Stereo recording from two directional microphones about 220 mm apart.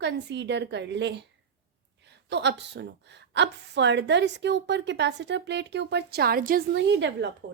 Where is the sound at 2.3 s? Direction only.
50° right (ahead or behind).